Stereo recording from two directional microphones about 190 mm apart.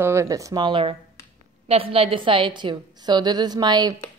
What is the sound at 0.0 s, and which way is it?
A woman's voice, 15° right (ahead or behind).